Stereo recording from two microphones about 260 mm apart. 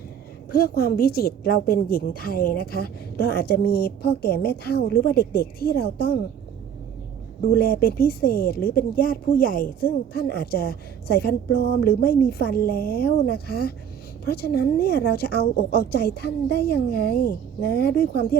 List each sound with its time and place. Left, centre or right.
0.5 s speech: left
7.5 s speech: left